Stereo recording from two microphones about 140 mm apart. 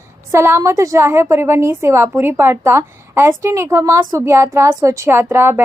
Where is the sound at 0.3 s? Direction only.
20° right (ahead or behind).